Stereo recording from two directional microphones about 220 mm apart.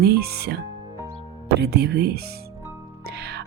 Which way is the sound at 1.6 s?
50° right (ahead or behind).